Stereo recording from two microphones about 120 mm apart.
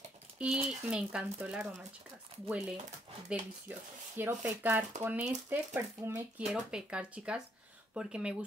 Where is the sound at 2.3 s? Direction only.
60° right (ahead or behind).